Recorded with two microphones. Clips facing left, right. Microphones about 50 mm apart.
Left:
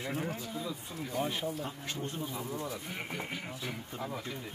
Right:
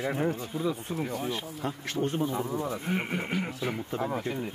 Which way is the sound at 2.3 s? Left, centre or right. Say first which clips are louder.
Right 7 dB; right.